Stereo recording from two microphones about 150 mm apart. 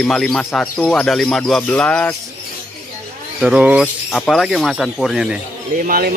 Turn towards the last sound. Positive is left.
turn(degrees=-75)  # may be behind; listen again after turning